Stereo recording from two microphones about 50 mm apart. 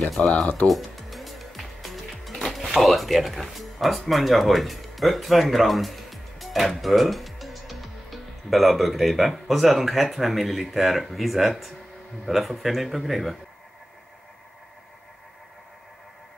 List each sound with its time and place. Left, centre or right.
0.2 s speech: left
0.7 s music: centre
2.4 s speech: centre